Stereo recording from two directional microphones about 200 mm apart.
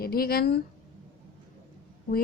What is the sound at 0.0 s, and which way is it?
Speech, 50° left (ahead or behind).